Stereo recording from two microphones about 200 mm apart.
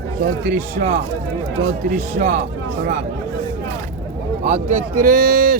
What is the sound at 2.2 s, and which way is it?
Speech, 35° right (ahead or behind).